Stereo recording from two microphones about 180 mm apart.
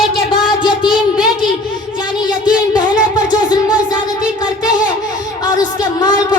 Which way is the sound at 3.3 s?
25° left (ahead or behind).